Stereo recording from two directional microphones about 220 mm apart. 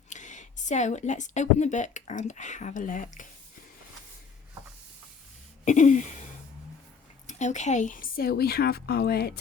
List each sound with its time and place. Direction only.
0.1 s speech: 35° left (ahead or behind)
5.6 s a sound: 35° left (ahead or behind)
7.3 s a woman's voice: 30° left (ahead or behind)